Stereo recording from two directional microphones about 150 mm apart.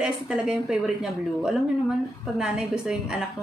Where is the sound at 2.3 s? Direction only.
5° right (ahead or behind).